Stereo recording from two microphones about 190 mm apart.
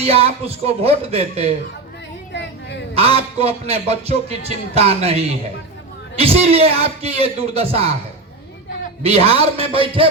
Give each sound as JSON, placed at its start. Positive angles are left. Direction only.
{"t": 0.0, "sound": "a man's voice", "side_deg": -30}
{"t": 2.3, "sound": "a sound", "side_deg": 65}
{"t": 2.9, "sound": "a man's voice", "side_deg": -30}
{"t": 9.0, "sound": "a man's voice", "side_deg": -30}